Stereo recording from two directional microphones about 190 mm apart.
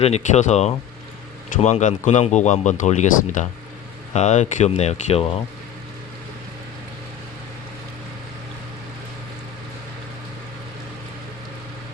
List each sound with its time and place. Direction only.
0.0 s speech: 35° left (ahead or behind)